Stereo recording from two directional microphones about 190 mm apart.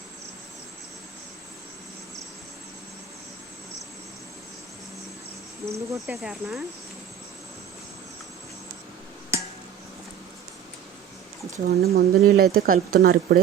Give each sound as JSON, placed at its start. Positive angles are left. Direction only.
{"t": 5.6, "sound": "speech", "side_deg": -15}
{"t": 6.1, "sound": "speech", "side_deg": -5}
{"t": 11.5, "sound": "speech", "side_deg": -50}